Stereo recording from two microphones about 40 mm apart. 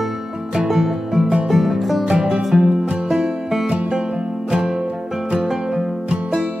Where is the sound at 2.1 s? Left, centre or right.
Right.